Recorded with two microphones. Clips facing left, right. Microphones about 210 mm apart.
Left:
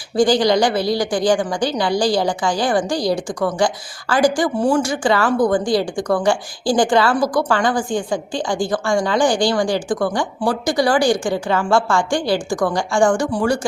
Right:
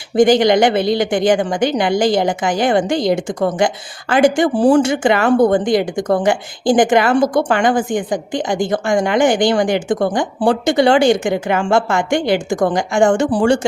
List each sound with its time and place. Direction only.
0.2 s a woman's voice: 20° right (ahead or behind)